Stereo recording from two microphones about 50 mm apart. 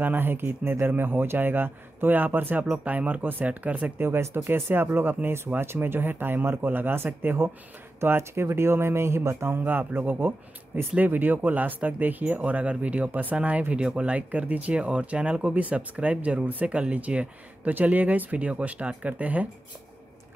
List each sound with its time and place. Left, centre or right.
0.0 s speech: right
2.7 s speech: right
4.0 s speech: right
9.7 s speech: right